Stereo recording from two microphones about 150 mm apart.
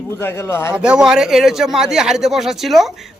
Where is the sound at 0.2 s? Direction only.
15° left (ahead or behind).